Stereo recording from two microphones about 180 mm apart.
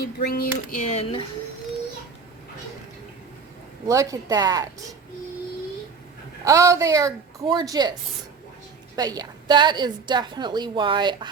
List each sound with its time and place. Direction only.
0.0 s speech: 60° left (ahead or behind); by 1.2 s 35° left (ahead or behind)
3.8 s a woman's voice: 20° right (ahead or behind)
6.4 s a woman's voice: 15° right (ahead or behind)
9.0 s a woman's voice: 20° right (ahead or behind)